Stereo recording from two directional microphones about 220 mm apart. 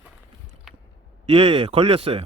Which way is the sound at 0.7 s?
Centre (ahead or behind).